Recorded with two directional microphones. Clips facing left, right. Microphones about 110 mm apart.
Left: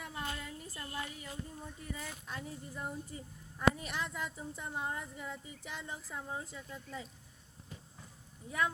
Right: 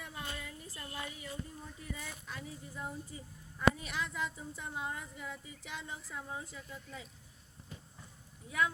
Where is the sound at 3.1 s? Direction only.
50° left (ahead or behind).